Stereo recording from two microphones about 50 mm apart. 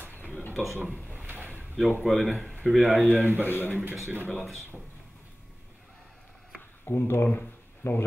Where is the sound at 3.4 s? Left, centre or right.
Left.